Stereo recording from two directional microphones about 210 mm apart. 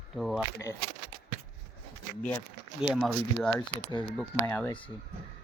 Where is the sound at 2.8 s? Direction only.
Centre (ahead or behind).